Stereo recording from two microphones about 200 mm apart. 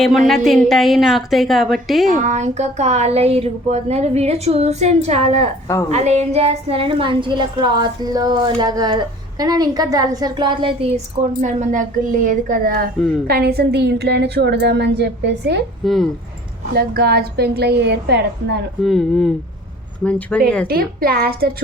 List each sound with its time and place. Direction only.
0.3 s a woman's voice: centre (ahead or behind)
2.1 s a woman's voice: 35° right (ahead or behind); by 15.6 s 60° right (ahead or behind)
15.8 s a woman's voice: centre (ahead or behind)
16.7 s a woman's voice: 50° right (ahead or behind)
18.8 s a woman's voice: centre (ahead or behind)
20.7 s a woman's voice: 50° right (ahead or behind)